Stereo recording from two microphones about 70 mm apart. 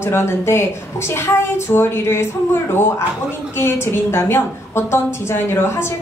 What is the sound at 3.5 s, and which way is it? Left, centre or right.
A woman's voice, left.